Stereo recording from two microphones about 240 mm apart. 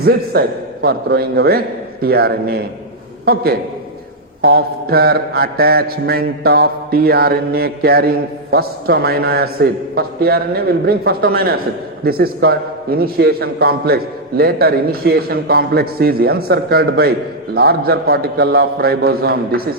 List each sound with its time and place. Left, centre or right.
0.0 s a man's voice: right